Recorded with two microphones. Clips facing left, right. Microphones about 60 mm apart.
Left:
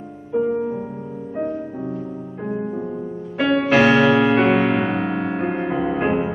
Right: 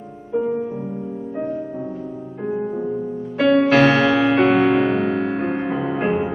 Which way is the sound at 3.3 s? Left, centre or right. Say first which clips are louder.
Right 2 dB; centre.